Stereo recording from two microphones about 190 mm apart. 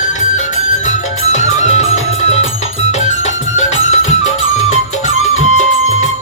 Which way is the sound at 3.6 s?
35° left (ahead or behind).